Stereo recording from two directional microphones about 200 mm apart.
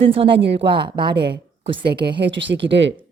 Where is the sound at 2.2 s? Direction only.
65° right (ahead or behind).